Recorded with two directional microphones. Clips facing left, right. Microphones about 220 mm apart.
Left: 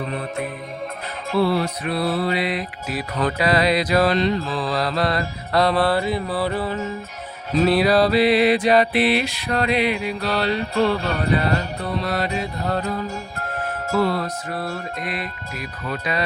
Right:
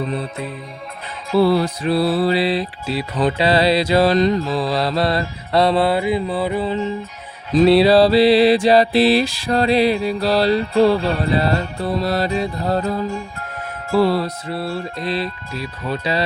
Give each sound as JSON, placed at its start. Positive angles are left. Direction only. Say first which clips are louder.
{"t": 1.4, "sound": "mantra", "louder": "right 5 dB", "side_deg": -35}
{"t": 4.4, "sound": "mantra", "louder": "right 4 dB", "side_deg": -40}
{"t": 5.8, "sound": "mantra", "louder": "right 3 dB", "side_deg": -15}
{"t": 7.5, "sound": "mantra", "louder": "right 5 dB", "side_deg": -30}
{"t": 14.0, "sound": "mantra", "louder": "right 5 dB", "side_deg": -35}